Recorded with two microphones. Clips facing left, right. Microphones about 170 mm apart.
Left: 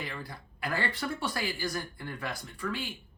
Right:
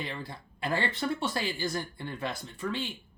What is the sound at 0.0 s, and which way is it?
Speech, 25° right (ahead or behind).